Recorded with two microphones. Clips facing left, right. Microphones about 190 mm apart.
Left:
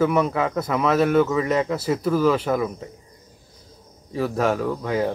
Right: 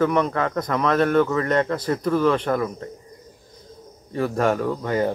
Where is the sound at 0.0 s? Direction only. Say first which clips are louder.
Even; 5° left (ahead or behind).